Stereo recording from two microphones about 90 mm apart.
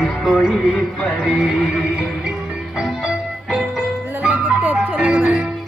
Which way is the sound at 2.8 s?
10° right (ahead or behind).